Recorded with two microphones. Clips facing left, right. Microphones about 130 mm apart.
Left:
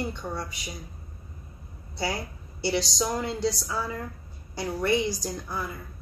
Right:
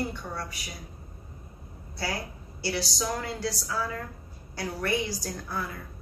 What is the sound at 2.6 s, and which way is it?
A woman's voice, 20° left (ahead or behind).